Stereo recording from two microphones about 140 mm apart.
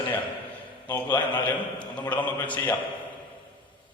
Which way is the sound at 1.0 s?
30° left (ahead or behind).